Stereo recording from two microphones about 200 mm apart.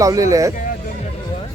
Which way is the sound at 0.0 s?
15° right (ahead or behind).